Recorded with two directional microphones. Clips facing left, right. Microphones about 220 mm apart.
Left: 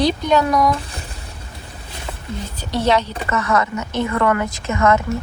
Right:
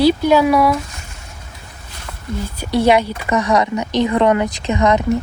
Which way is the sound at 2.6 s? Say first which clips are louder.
Right 4 dB; 10° right (ahead or behind).